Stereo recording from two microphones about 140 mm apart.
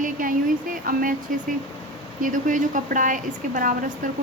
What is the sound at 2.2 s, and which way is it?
A woman's voice, 70° right (ahead or behind).